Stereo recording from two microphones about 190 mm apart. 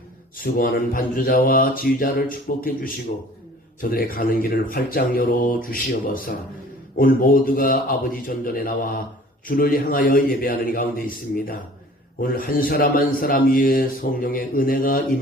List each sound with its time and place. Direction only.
0.3 s speech: 50° left (ahead or behind)